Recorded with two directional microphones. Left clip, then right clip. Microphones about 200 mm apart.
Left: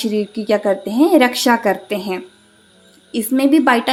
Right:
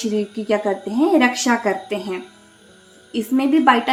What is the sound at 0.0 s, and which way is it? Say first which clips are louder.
A woman's voice: left 3 dB; 40° left (ahead or behind).